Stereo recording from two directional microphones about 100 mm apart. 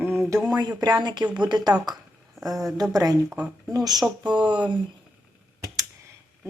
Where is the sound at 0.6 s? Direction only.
40° right (ahead or behind).